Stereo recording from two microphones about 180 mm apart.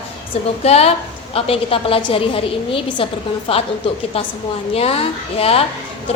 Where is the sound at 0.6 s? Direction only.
35° left (ahead or behind).